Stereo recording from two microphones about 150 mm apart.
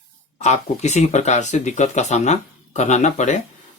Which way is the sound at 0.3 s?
50° left (ahead or behind).